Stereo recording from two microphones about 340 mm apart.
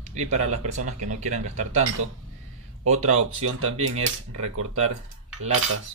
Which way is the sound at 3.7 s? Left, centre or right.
Centre.